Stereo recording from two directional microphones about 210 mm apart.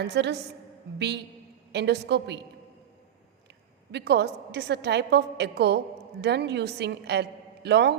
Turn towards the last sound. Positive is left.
turn(degrees=-55)  # may be behind; listen again after turning